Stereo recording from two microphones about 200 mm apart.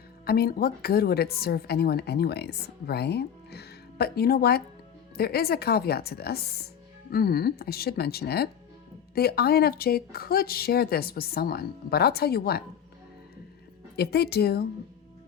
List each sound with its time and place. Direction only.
0.3 s a woman's voice: 50° left (ahead or behind)
13.9 s a woman's voice: 55° left (ahead or behind)